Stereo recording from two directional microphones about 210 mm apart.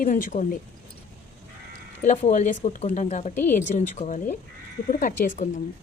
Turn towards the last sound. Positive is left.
turn(degrees=40)  # may be behind; listen again after turning